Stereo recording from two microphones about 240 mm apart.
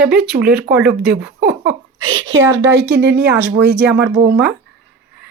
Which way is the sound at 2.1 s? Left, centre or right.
Right.